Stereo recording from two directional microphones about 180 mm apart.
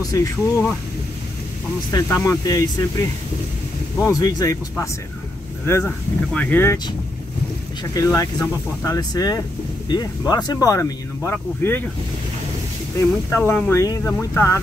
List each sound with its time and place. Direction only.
0.1 s speech: 20° left (ahead or behind)
1.9 s speech: 20° left (ahead or behind)
7.9 s speech: 20° left (ahead or behind)
12.9 s speech: 15° left (ahead or behind)